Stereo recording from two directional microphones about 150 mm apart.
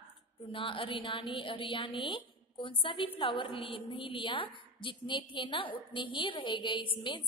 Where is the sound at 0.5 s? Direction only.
35° left (ahead or behind).